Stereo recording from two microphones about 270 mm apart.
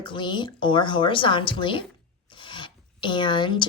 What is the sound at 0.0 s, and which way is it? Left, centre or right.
A woman's voice, centre.